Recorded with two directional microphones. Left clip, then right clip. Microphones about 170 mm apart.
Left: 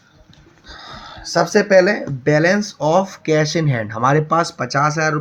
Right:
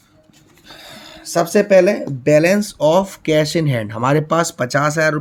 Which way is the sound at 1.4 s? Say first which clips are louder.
Even; 55° right (ahead or behind).